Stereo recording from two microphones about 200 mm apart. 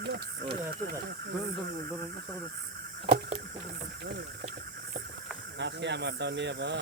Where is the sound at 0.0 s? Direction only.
55° right (ahead or behind).